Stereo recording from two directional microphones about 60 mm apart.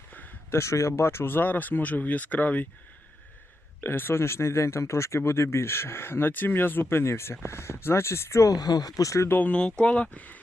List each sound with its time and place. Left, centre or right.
0.5 s speech: left
3.8 s speech: left
8.4 s speech: left
9.0 s speech: left
9.3 s speech: left